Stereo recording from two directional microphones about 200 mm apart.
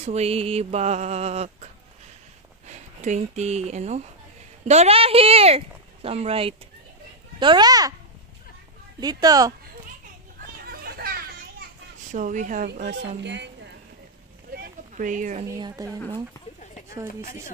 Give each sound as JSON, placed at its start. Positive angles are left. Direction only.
{"t": 0.0, "sound": "speech", "side_deg": -30}
{"t": 2.7, "sound": "speech", "side_deg": -35}
{"t": 9.0, "sound": "speech", "side_deg": -20}
{"t": 10.6, "sound": "a sound", "side_deg": -50}
{"t": 12.1, "sound": "speech", "side_deg": -40}
{"t": 13.2, "sound": "speech", "side_deg": -60}
{"t": 14.5, "sound": "a sound", "side_deg": -45}
{"t": 15.5, "sound": "a woman's voice", "side_deg": -20}
{"t": 17.1, "sound": "speech", "side_deg": 45}